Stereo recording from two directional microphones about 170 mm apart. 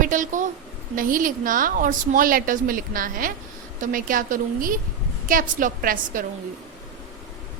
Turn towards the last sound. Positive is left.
turn(degrees=-55)  # may be behind; listen again after turning